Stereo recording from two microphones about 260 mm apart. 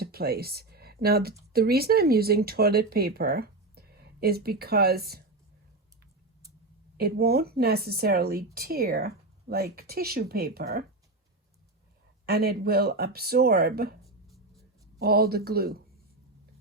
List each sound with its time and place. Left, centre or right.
0.0 s speech: right
6.9 s speech: right
12.2 s speech: right
14.0 s writing: centre
14.9 s speech: right